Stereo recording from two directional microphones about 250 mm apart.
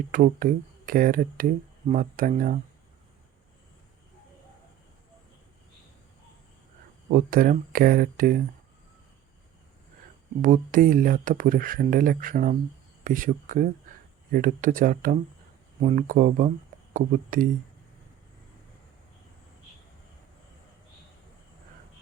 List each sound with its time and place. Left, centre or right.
0.1 s speech: right
7.1 s speech: right
10.4 s speech: right